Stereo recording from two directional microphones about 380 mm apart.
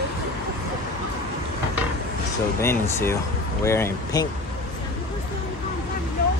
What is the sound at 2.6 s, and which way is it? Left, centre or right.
Speech, centre.